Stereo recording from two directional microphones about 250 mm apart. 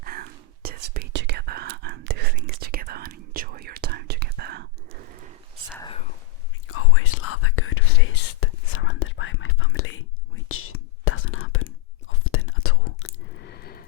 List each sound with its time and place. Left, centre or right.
0.0 s whispering: right
6.7 s whispering: left
13.1 s squish: left